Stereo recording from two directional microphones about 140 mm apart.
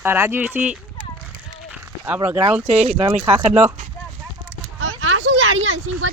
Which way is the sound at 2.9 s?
50° right (ahead or behind).